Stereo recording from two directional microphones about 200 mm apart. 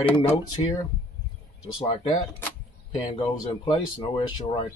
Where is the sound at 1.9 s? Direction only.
25° left (ahead or behind).